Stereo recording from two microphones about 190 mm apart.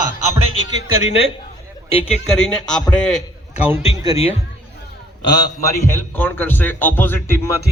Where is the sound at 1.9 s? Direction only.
30° left (ahead or behind).